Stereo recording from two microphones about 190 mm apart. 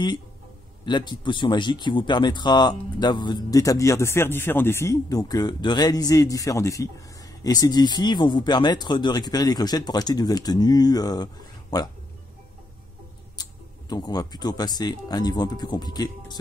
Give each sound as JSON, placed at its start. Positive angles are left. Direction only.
{"t": 0.8, "sound": "speech", "side_deg": 25}
{"t": 13.4, "sound": "speech", "side_deg": 20}